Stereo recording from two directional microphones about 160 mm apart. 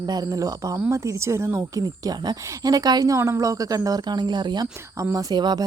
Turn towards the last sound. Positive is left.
turn(degrees=-25)  # may be behind; listen again after turning